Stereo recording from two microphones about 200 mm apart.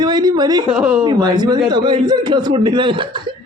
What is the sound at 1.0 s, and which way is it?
Speech, 20° right (ahead or behind).